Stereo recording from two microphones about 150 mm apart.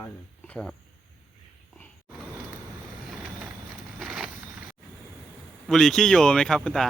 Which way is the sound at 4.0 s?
Centre (ahead or behind).